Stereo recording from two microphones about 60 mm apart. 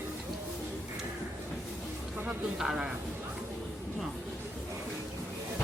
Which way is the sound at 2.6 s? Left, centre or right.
Centre.